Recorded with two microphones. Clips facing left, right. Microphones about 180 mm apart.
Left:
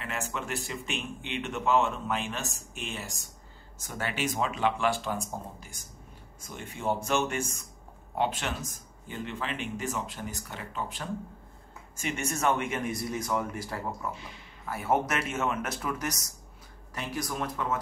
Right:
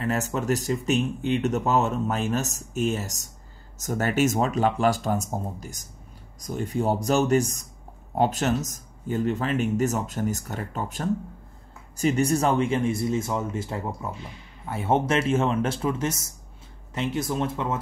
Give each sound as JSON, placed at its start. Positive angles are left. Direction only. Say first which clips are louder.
{"t": 0.0, "sound": "speech", "louder": "right 9 dB", "side_deg": -40}